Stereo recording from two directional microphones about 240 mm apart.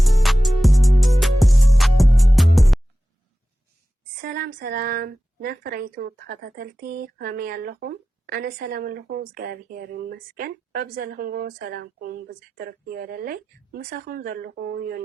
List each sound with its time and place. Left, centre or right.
0.0 s music: centre
4.2 s a woman's voice: right